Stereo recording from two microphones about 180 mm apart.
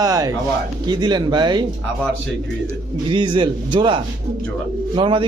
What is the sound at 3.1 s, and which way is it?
A man's voice, 25° right (ahead or behind).